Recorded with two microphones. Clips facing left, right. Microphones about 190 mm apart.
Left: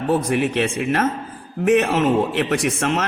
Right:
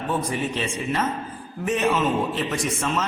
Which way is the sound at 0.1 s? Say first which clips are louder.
Left 7 dB; 70° left (ahead or behind).